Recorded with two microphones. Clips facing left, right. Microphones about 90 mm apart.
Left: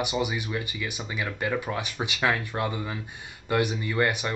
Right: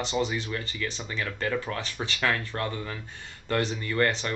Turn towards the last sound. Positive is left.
turn(degrees=15)  # may be behind; listen again after turning